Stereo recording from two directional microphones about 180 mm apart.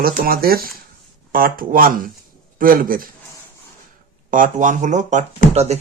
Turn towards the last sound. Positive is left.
turn(degrees=-35)  # may be behind; listen again after turning